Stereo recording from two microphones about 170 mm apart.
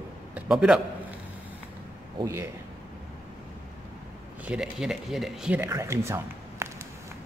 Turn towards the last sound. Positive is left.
turn(degrees=-15)  # may be behind; listen again after turning